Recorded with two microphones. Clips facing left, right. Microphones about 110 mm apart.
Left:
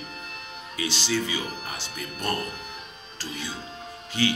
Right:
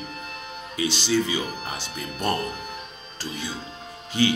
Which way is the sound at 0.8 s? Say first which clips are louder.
Right 4 dB; 20° right (ahead or behind).